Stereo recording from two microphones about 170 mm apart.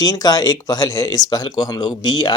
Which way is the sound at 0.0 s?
20° left (ahead or behind).